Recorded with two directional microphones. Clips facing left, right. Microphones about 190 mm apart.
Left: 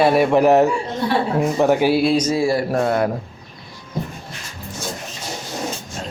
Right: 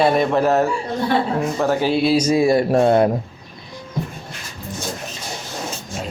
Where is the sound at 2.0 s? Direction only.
5° right (ahead or behind); by 3.1 s 25° right (ahead or behind).